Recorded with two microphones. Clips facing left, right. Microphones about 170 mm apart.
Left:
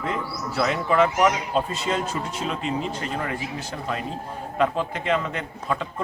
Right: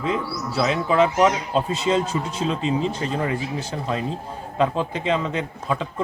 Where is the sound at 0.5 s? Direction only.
20° right (ahead or behind).